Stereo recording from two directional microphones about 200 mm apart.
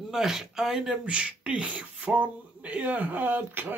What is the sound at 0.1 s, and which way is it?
Speech, centre (ahead or behind).